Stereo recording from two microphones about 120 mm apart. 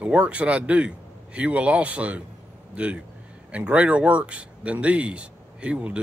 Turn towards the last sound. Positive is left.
turn(degrees=-10)  # may be behind; listen again after turning